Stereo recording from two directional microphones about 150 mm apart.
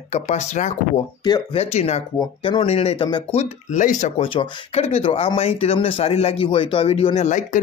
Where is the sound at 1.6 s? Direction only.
45° left (ahead or behind).